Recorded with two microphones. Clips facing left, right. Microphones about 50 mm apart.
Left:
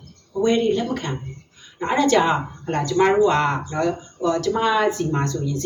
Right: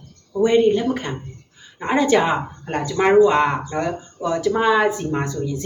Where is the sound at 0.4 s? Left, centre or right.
Centre.